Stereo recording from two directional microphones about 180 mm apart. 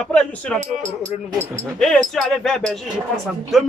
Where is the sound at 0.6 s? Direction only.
45° right (ahead or behind).